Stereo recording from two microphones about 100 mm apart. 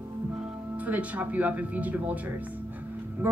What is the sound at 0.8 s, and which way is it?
A woman's voice, 15° right (ahead or behind).